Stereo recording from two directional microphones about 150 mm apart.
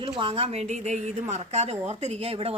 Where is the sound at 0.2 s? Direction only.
40° right (ahead or behind).